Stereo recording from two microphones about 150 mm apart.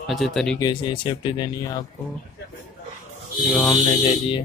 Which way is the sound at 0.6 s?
30° left (ahead or behind).